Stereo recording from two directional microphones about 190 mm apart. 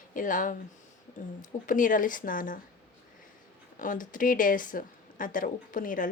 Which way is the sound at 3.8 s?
45° left (ahead or behind).